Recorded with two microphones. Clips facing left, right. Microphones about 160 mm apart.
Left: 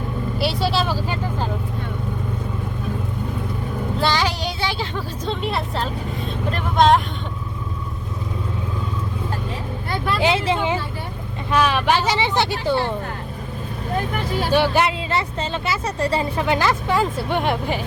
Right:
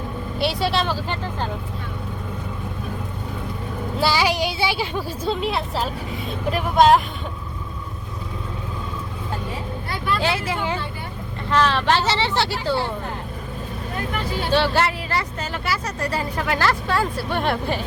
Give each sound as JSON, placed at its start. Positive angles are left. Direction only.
{"t": 0.3, "sound": "vehicle", "side_deg": 0}
{"t": 4.0, "sound": "vehicle", "side_deg": -10}
{"t": 6.5, "sound": "speech", "side_deg": -5}
{"t": 10.2, "sound": "speech", "side_deg": 20}
{"t": 14.5, "sound": "speech", "side_deg": 15}